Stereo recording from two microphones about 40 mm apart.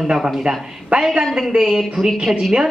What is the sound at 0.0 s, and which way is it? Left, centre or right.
Speech, centre.